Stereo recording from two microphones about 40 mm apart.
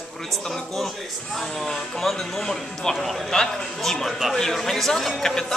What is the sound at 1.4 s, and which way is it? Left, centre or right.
A man's voice, centre.